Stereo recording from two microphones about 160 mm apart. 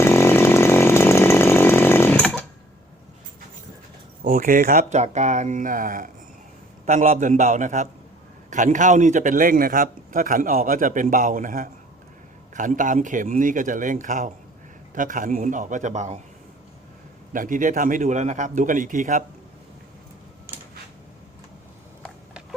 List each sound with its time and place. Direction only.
0.0 s chainsaw: 15° left (ahead or behind)
4.2 s a man's voice: 65° right (ahead or behind)
17.3 s a man's voice: 55° right (ahead or behind)